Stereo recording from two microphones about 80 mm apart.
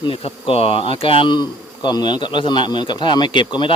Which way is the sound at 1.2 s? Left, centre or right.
Left.